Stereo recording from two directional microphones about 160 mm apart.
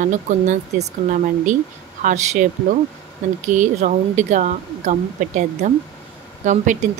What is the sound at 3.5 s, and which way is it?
Speech, 50° right (ahead or behind).